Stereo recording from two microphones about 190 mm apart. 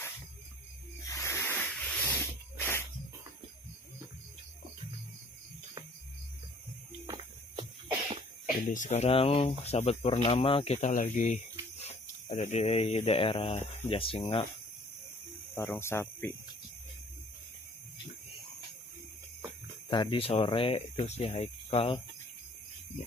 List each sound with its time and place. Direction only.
1.0 s a sound: 15° left (ahead or behind)
8.6 s speech: 40° left (ahead or behind)
15.5 s speech: 10° left (ahead or behind)
19.9 s speech: 25° left (ahead or behind)